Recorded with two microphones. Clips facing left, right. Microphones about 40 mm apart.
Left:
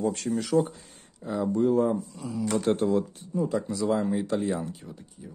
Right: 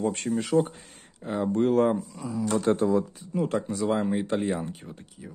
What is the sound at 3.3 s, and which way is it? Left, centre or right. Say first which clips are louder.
Speech: even; right.